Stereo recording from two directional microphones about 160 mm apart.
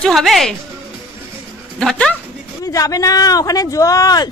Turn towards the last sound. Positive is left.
turn(degrees=25)  # may be behind; listen again after turning